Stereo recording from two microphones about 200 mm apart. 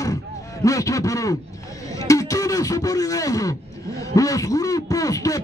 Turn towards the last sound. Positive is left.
turn(degrees=15)  # may be behind; listen again after turning